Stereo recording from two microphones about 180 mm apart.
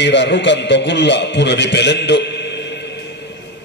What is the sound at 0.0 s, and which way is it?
A man's voice, 75° left (ahead or behind).